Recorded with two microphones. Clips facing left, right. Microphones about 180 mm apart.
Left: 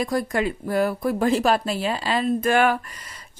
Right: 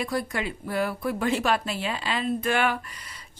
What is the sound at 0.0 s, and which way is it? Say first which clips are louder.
A woman's voice: left 5 dB; 45° left (ahead or behind).